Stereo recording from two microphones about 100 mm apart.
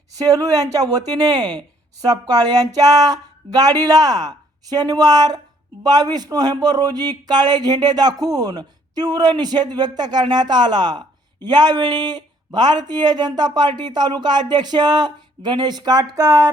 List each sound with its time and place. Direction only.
0.1 s a man's voice: 35° right (ahead or behind)